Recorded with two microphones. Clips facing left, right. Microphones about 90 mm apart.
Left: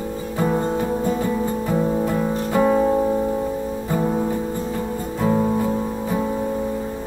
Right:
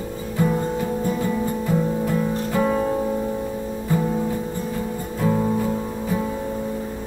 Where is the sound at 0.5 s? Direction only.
35° left (ahead or behind).